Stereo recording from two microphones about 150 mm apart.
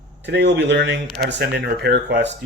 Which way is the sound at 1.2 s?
90° right.